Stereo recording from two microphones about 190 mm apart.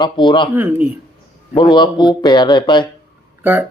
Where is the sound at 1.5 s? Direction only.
25° left (ahead or behind).